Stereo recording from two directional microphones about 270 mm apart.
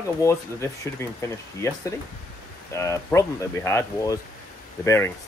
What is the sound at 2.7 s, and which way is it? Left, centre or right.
Speech, centre.